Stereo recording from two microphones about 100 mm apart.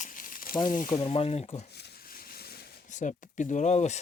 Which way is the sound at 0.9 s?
75° left (ahead or behind).